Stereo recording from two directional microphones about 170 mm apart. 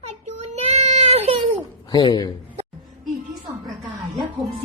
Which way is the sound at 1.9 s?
25° left (ahead or behind).